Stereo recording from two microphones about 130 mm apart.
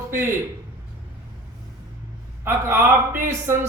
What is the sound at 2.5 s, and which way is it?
Speech, 20° right (ahead or behind).